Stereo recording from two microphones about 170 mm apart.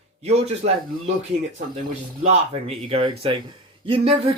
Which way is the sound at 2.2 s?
40° right (ahead or behind).